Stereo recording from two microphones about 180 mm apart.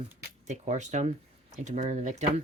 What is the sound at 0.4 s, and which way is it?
Speech, 40° right (ahead or behind).